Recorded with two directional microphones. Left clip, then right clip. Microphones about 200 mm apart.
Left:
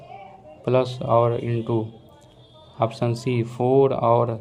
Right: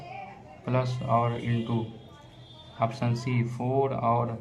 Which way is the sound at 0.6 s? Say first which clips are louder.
Left 8 dB; 40° left (ahead or behind).